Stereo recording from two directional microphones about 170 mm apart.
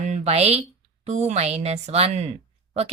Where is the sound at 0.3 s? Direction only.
40° right (ahead or behind).